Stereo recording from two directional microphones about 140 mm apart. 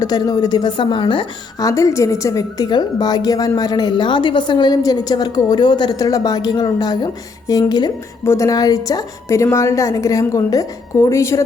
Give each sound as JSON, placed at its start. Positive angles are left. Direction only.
{"t": 0.0, "sound": "a woman's voice", "side_deg": 25}